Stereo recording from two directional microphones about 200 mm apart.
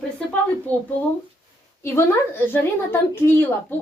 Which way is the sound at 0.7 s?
10° left (ahead or behind).